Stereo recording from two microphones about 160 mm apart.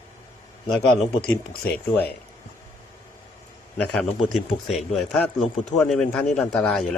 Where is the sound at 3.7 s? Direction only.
5° left (ahead or behind).